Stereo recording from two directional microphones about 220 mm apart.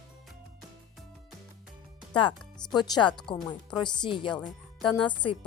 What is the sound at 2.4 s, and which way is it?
Music, 5° left (ahead or behind).